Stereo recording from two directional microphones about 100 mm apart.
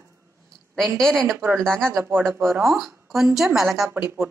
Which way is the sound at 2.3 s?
20° right (ahead or behind).